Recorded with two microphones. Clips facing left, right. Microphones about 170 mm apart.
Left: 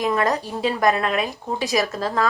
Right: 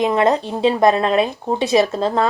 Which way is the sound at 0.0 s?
20° right (ahead or behind).